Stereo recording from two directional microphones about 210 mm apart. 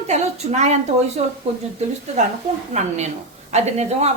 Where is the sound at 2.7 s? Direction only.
35° right (ahead or behind).